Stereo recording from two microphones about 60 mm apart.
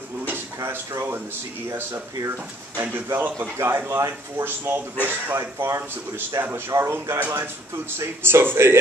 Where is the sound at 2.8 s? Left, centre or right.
Right.